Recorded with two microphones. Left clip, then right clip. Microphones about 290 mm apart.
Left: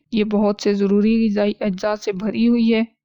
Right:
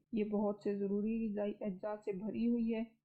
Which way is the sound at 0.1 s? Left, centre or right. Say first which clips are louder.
Left 18 dB; left.